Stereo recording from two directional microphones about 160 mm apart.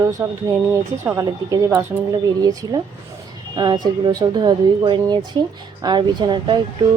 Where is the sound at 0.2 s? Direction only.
15° right (ahead or behind).